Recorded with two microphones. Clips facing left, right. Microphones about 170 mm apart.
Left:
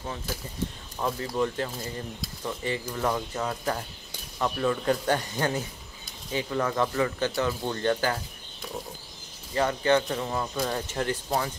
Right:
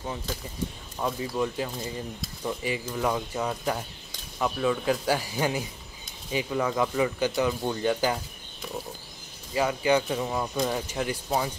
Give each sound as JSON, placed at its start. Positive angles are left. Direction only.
{"t": 1.0, "sound": "speech", "side_deg": -10}
{"t": 9.5, "sound": "speech", "side_deg": -10}